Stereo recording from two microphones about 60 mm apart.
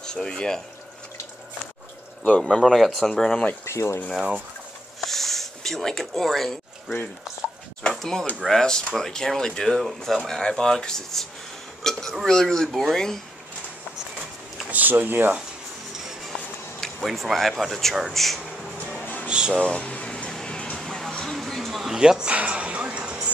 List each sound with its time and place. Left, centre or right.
0.0 s speech: centre
2.4 s speech: centre
3.6 s speech: left
5.0 s a sound: centre
7.9 s speech: centre
14.7 s speech: right
15.9 s music: centre
17.0 s speech: centre
18.9 s music: left
19.2 s music: centre
19.5 s music: centre
20.8 s music: centre
21.1 s a sound: centre